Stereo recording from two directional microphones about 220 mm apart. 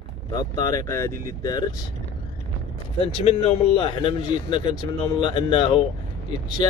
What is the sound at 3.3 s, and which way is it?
Speech, 25° left (ahead or behind).